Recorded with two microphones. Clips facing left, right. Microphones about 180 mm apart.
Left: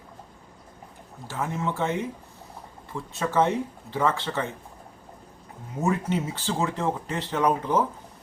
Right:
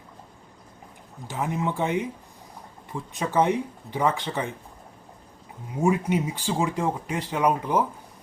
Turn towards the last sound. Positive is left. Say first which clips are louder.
# even
turn(degrees=-10)  # may be behind; listen again after turning